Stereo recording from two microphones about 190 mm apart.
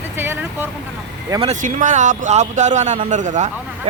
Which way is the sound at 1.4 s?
40° right (ahead or behind).